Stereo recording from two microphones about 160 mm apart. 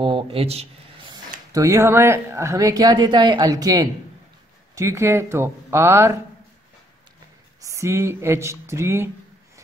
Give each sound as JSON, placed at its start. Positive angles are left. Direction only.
{"t": 0.0, "sound": "speech", "side_deg": -35}
{"t": 1.1, "sound": "speech", "side_deg": -20}
{"t": 7.6, "sound": "speech", "side_deg": -20}